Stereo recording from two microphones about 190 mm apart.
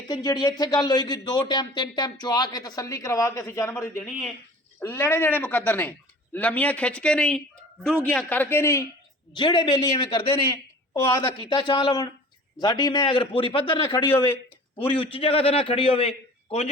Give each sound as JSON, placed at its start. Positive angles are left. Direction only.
{"t": 0.1, "sound": "a man's voice", "side_deg": 20}
{"t": 10.5, "sound": "a sound", "side_deg": 15}
{"t": 11.2, "sound": "a man's voice", "side_deg": 25}
{"t": 13.9, "sound": "speech", "side_deg": 15}
{"t": 14.9, "sound": "a man's voice", "side_deg": 30}